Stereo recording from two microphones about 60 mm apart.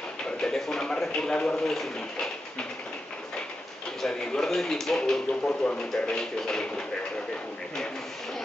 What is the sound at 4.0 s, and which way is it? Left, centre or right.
Speech, centre.